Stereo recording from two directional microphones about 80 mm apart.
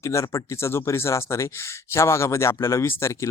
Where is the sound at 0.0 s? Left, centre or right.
Left.